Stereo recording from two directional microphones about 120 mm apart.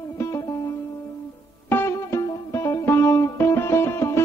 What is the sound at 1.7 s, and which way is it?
Music, 20° left (ahead or behind).